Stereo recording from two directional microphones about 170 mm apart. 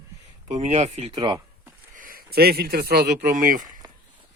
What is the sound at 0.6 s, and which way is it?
Speech, 40° right (ahead or behind).